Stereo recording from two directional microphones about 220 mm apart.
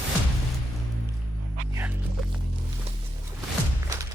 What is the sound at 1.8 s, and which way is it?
Hum, 10° right (ahead or behind).